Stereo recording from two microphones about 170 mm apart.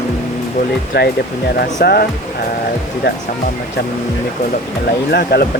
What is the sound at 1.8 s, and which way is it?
Speech, 65° left (ahead or behind).